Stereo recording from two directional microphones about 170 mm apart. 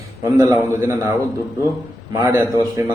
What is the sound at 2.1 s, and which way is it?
Speech, 20° right (ahead or behind).